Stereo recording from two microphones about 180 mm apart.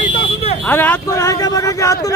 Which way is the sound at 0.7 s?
15° left (ahead or behind).